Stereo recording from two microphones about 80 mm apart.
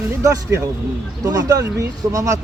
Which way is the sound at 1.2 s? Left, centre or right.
Right.